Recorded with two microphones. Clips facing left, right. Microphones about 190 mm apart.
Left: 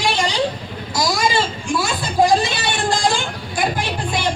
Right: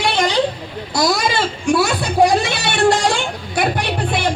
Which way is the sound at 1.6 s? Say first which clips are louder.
Right 5 dB; 65° right (ahead or behind).